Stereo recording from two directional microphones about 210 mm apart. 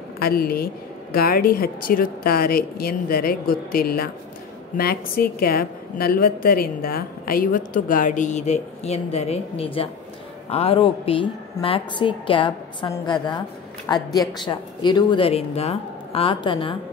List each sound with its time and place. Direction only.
0.2 s a woman's voice: 45° left (ahead or behind); by 16.7 s 25° left (ahead or behind)